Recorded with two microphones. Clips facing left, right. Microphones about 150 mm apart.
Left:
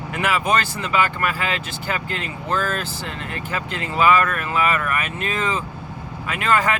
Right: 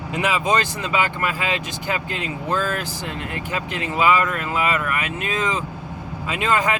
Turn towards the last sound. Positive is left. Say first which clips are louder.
# even
turn(degrees=-15)  # may be behind; listen again after turning